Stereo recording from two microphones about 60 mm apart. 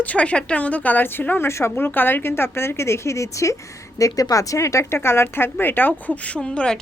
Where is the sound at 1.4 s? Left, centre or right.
Left.